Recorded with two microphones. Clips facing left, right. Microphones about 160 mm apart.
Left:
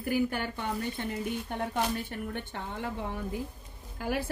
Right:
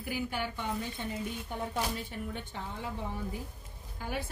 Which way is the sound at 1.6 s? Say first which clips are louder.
Left 3 dB; 65° left (ahead or behind).